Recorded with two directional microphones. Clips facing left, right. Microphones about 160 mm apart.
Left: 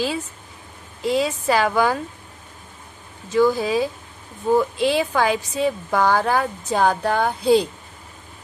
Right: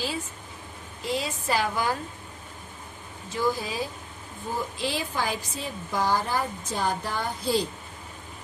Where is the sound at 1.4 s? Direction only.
90° left.